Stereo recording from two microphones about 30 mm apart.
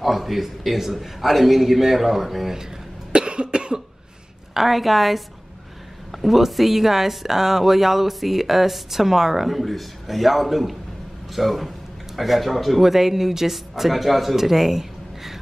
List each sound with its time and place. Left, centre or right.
0.0 s speech: centre
3.1 s cough: right
4.6 s a woman's voice: centre